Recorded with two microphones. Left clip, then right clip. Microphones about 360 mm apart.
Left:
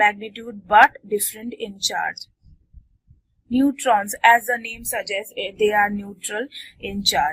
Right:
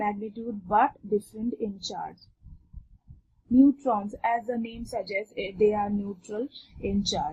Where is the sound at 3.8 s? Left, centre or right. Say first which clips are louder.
Left 11 dB; left.